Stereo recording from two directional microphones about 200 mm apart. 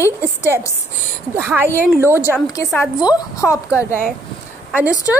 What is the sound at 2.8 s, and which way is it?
Speech, 15° left (ahead or behind).